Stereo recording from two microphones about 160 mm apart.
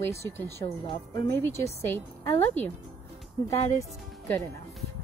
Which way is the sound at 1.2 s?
15° left (ahead or behind).